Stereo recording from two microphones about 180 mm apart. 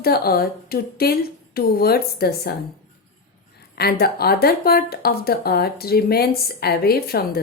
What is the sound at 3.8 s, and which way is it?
Speech, 60° left (ahead or behind).